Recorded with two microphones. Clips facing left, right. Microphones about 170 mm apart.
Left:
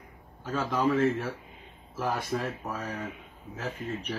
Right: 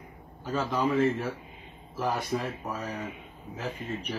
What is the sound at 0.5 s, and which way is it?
A man's voice, centre (ahead or behind).